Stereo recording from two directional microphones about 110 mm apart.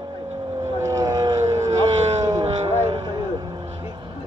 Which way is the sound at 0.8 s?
30° right (ahead or behind).